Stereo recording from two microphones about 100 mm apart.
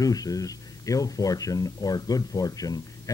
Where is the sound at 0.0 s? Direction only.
40° left (ahead or behind).